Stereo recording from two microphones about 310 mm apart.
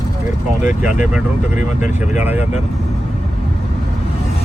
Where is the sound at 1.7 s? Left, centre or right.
Left.